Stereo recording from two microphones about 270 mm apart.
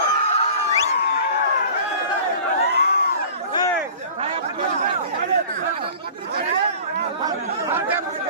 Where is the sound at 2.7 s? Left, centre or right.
Left.